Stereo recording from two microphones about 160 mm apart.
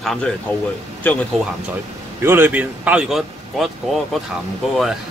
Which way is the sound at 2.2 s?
15° right (ahead or behind).